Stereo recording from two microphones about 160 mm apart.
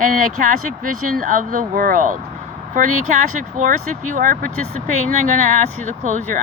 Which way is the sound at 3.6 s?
55° right (ahead or behind).